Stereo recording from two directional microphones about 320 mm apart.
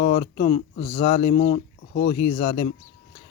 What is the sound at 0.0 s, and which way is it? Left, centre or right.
Speech, left.